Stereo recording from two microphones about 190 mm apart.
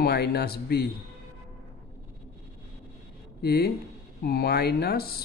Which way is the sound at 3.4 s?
55° left (ahead or behind).